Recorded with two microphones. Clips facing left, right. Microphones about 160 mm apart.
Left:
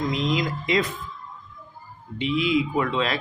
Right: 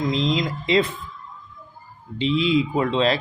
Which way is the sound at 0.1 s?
25° right (ahead or behind).